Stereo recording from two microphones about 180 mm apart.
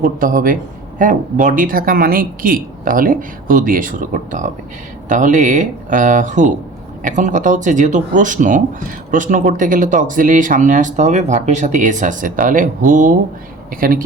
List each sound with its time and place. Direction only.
0.0 s speech: 50° right (ahead or behind)